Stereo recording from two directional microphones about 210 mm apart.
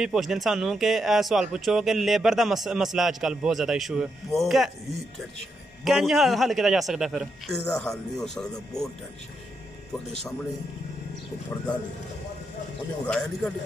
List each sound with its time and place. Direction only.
0.0 s speech: centre (ahead or behind)
5.9 s speech: centre (ahead or behind)
13.0 s speech: 5° left (ahead or behind)